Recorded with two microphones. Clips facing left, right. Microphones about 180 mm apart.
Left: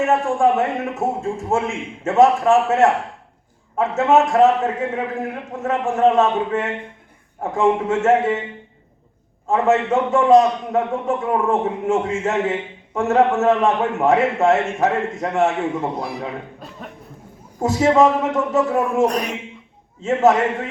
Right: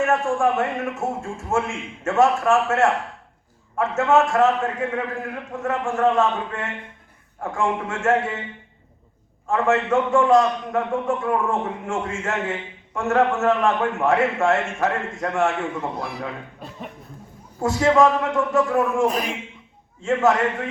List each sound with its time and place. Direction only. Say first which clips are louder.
0.0 s a man's voice: left 3 dB; 20° left (ahead or behind)
9.5 s a man's voice: left 3 dB; 20° left (ahead or behind)
17.6 s a man's voice: left 2 dB; 20° left (ahead or behind)
19.0 s speech: left 2 dB; 5° right (ahead or behind)
20.0 s a man's voice: left 3 dB; 20° left (ahead or behind)